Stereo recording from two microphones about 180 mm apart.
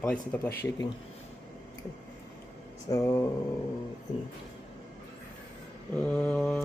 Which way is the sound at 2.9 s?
15° left (ahead or behind).